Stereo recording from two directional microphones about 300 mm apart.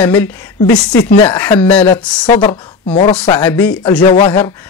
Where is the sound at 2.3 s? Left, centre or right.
Centre.